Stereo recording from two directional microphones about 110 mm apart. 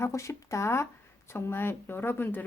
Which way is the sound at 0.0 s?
25° left (ahead or behind).